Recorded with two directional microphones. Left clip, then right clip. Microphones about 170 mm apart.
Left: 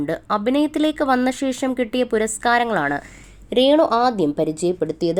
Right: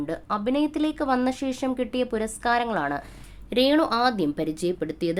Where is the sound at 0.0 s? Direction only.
25° left (ahead or behind).